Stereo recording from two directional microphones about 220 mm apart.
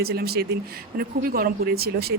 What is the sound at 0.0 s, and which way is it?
Speech, 45° right (ahead or behind).